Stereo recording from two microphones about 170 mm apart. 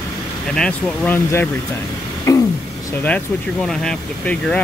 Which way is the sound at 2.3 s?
20° left (ahead or behind).